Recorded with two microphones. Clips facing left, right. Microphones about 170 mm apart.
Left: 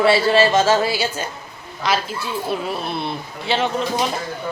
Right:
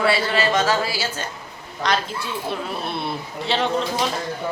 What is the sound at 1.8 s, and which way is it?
Speech, 5° left (ahead or behind).